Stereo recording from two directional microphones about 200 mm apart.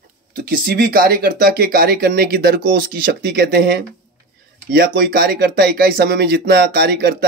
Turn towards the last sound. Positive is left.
turn(degrees=-50)  # may be behind; listen again after turning